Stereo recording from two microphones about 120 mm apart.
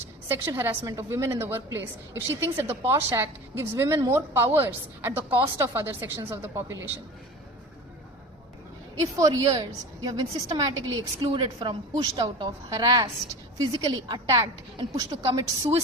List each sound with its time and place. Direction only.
0.3 s a woman's voice: 20° right (ahead or behind)
9.2 s a woman's voice: 30° right (ahead or behind)